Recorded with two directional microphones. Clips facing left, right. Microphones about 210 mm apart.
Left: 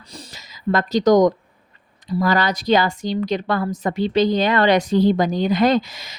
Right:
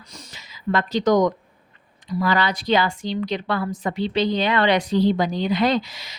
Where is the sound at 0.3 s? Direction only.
40° left (ahead or behind).